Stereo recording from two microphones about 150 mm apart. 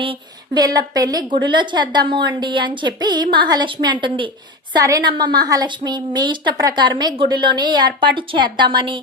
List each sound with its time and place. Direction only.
0.0 s a woman's voice: 30° right (ahead or behind)